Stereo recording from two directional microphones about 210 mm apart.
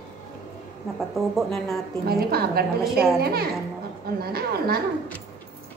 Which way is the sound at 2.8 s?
Centre (ahead or behind).